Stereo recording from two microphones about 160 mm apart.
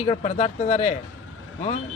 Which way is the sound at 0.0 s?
40° left (ahead or behind).